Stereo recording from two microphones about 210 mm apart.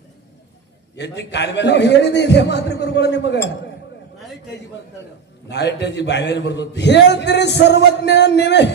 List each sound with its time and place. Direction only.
0.9 s a man's voice: 55° left (ahead or behind)
5.5 s a man's voice: 55° left (ahead or behind)